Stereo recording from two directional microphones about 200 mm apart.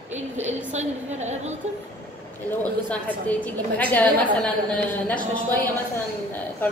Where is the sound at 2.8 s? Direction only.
10° left (ahead or behind).